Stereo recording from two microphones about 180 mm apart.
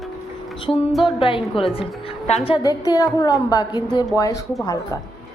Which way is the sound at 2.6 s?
20° left (ahead or behind).